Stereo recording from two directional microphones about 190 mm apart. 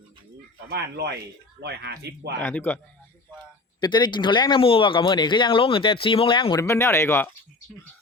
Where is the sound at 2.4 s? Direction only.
10° left (ahead or behind).